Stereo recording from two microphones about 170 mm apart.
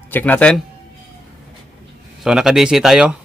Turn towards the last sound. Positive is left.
turn(degrees=-5)  # may be behind; listen again after turning